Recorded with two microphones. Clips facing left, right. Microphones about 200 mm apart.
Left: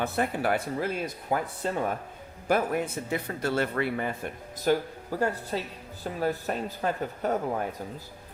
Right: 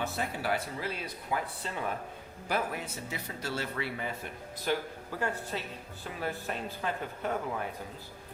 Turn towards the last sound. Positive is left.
turn(degrees=40)  # may be behind; listen again after turning